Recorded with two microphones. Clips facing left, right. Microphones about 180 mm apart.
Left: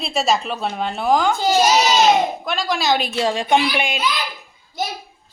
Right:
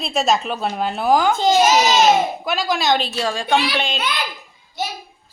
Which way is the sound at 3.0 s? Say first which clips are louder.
Left 2 dB; 20° left (ahead or behind).